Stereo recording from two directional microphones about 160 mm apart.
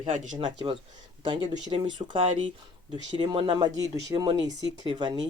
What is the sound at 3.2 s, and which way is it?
Speech, 35° right (ahead or behind).